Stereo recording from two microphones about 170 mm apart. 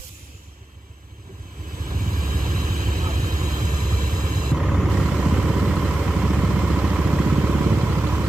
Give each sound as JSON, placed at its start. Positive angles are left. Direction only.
{"t": 1.9, "sound": "vehicle", "side_deg": -55}
{"t": 3.3, "sound": "vehicle", "side_deg": -20}
{"t": 4.6, "sound": "vehicle", "side_deg": 0}